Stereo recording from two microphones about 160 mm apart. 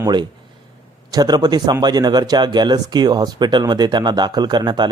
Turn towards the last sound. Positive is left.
turn(degrees=-25)  # may be behind; listen again after turning